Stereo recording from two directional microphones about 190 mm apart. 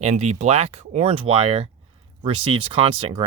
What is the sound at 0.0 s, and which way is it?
Speech, 35° right (ahead or behind).